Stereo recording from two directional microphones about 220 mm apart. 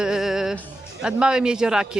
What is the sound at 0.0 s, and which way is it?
Music, centre (ahead or behind).